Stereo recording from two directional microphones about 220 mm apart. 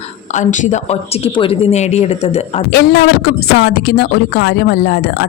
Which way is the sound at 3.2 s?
45° left (ahead or behind).